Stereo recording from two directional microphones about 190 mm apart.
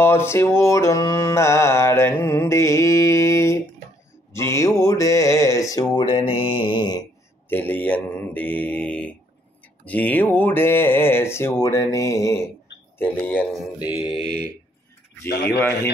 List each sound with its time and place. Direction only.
0.0 s carnatic music: 15° left (ahead or behind)
5.9 s mantra: 25° left (ahead or behind)
7.4 s carnatic music: 10° left (ahead or behind)
15.2 s a man's voice: 60° left (ahead or behind)
15.5 s carnatic music: 15° left (ahead or behind)